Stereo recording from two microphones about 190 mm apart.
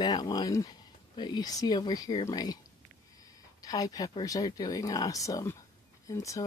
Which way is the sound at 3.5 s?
20° left (ahead or behind).